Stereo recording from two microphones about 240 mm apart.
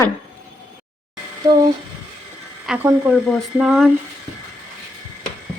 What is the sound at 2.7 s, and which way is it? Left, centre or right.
Speech, centre.